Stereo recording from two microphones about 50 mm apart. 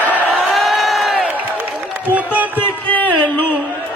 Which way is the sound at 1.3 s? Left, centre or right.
Right.